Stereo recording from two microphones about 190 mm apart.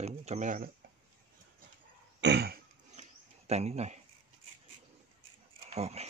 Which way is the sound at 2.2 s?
60° right (ahead or behind).